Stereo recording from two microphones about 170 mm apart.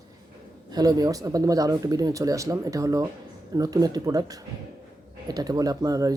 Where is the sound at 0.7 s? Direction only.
20° right (ahead or behind).